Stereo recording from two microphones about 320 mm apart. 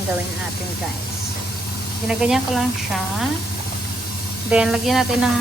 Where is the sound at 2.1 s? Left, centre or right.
Centre.